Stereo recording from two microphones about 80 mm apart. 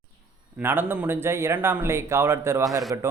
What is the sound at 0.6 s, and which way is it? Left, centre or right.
Speech, right.